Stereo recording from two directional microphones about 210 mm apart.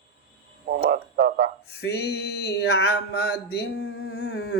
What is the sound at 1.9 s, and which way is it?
Speech, 50° left (ahead or behind).